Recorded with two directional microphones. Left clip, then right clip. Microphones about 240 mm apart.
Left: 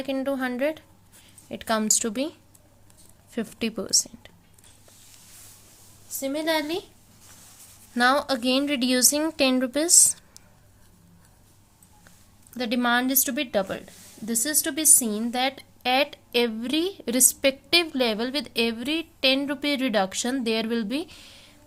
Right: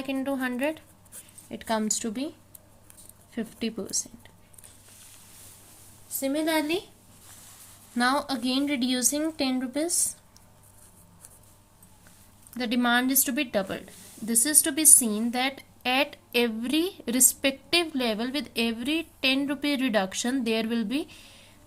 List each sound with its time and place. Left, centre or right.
0.0 s a woman's voice: centre
3.3 s a woman's voice: left
6.1 s a woman's voice: centre
7.9 s a woman's voice: centre
12.5 s a woman's voice: centre